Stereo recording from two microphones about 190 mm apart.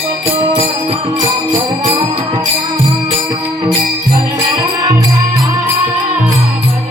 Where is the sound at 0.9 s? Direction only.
25° right (ahead or behind).